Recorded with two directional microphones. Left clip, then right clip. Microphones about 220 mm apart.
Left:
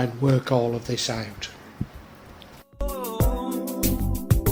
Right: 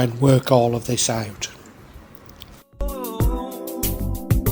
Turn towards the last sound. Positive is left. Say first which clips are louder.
# even
turn(degrees=0)  # may be behind; listen again after turning